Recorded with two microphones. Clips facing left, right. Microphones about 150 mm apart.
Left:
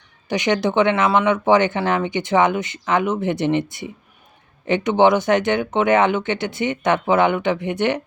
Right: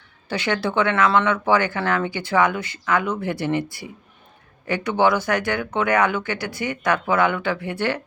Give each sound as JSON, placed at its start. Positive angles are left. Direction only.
{"t": 0.3, "sound": "speech", "side_deg": 20}